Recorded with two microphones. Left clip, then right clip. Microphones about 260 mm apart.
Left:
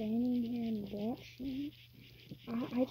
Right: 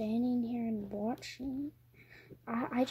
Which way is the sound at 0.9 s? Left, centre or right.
Right.